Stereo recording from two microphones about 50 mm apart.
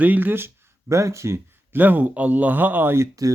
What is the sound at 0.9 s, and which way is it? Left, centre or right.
Speech, right.